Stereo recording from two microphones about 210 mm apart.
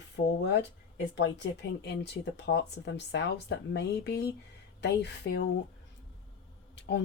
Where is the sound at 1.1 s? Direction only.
55° left (ahead or behind).